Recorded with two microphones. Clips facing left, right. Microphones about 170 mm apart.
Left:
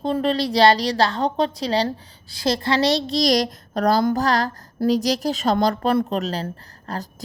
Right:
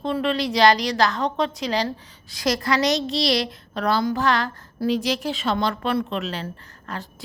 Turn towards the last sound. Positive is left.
turn(degrees=40)  # may be behind; listen again after turning